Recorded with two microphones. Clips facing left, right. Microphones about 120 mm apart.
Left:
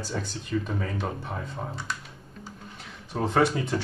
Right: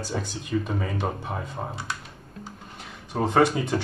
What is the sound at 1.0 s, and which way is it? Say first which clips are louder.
Speech: right 3 dB; 20° right (ahead or behind).